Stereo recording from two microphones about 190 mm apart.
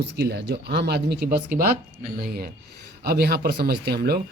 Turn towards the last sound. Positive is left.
turn(degrees=-55)  # may be behind; listen again after turning